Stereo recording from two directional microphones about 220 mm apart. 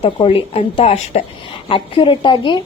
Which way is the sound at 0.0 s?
25° left (ahead or behind).